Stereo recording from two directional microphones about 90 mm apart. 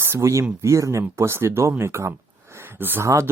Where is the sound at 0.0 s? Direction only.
30° right (ahead or behind).